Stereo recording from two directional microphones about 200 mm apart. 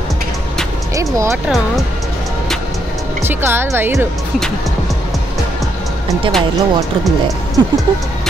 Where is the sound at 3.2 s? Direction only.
10° right (ahead or behind).